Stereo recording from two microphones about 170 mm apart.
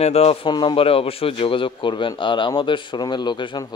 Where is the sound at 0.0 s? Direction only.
35° left (ahead or behind).